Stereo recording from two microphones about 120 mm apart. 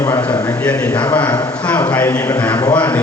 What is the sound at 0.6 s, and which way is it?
Speech, 15° left (ahead or behind).